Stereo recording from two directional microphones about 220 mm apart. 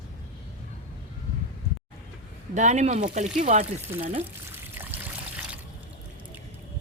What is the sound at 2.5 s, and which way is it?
Speech, 30° right (ahead or behind).